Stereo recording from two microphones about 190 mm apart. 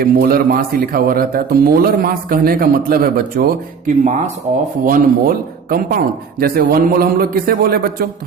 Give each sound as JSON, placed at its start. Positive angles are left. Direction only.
{"t": 0.0, "sound": "speech", "side_deg": -50}